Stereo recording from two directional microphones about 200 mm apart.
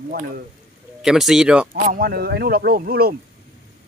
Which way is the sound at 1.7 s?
45° right (ahead or behind).